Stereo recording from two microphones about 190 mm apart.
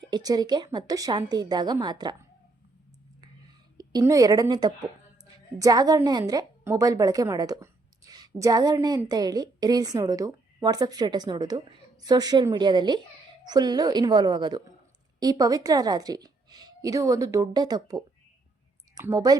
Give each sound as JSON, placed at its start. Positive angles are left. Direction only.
{"t": 0.1, "sound": "a woman's voice", "side_deg": -20}
{"t": 3.8, "sound": "a woman's voice", "side_deg": -20}